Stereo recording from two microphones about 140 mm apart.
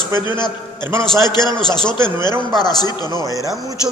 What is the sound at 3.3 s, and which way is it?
Speech, 25° right (ahead or behind).